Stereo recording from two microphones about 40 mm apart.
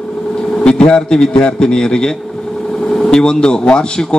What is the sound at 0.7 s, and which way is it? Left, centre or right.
A man's voice, left.